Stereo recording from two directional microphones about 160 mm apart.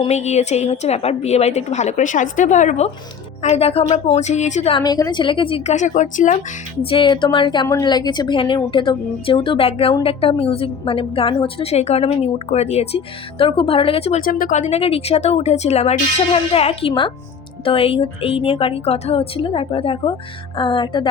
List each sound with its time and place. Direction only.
0.0 s a woman's voice: 45° left (ahead or behind)
4.8 s a woman's voice: 25° left (ahead or behind)
5.7 s a woman's voice: 50° left (ahead or behind)
6.8 s a woman's voice: 30° left (ahead or behind)
14.3 s a woman's voice: 60° left (ahead or behind); by 21.1 s 30° left (ahead or behind)